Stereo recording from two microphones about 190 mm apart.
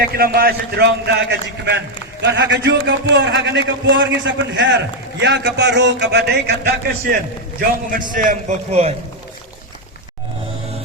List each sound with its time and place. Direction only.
0.0 s a man's voice: 50° right (ahead or behind)
8.1 s a man's voice: 45° right (ahead or behind)